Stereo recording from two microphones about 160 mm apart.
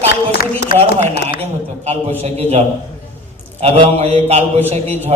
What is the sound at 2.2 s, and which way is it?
Speech, 40° right (ahead or behind).